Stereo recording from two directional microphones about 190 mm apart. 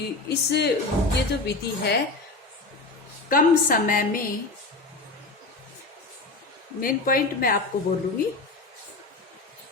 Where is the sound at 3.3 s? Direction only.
45° left (ahead or behind).